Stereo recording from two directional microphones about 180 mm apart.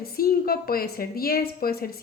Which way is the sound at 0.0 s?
55° left (ahead or behind).